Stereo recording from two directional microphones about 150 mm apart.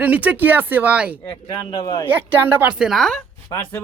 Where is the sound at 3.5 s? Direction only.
25° left (ahead or behind).